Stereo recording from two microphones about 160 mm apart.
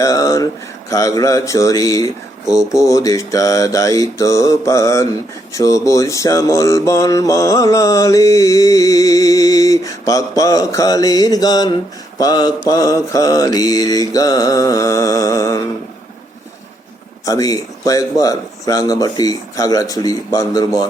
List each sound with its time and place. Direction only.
0.0 s a sound: 20° left (ahead or behind)
0.9 s mantra: 20° left (ahead or behind)
17.2 s mantra: 20° left (ahead or behind)